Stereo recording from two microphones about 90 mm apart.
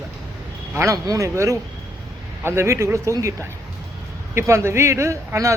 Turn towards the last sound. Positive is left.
turn(degrees=-35)  # may be behind; listen again after turning